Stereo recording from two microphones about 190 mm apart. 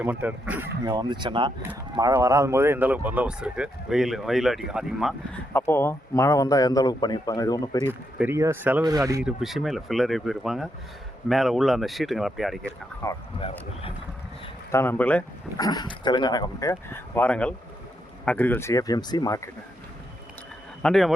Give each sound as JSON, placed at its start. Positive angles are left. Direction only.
{"t": 0.0, "sound": "speech", "side_deg": -10}
{"t": 0.9, "sound": "speech", "side_deg": -20}
{"t": 5.5, "sound": "a man's voice", "side_deg": 10}
{"t": 7.9, "sound": "speech", "side_deg": -10}
{"t": 9.2, "sound": "speech", "side_deg": 0}
{"t": 13.0, "sound": "speech", "side_deg": 15}
{"t": 13.4, "sound": "a man's voice", "side_deg": 30}
{"t": 14.7, "sound": "speech", "side_deg": 10}
{"t": 15.5, "sound": "a man's voice", "side_deg": 20}
{"t": 20.8, "sound": "speech", "side_deg": 0}